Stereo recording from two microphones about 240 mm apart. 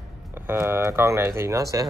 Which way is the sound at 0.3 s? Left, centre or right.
Centre.